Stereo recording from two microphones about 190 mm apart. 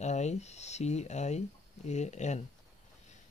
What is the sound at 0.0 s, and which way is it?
Speech, 35° left (ahead or behind).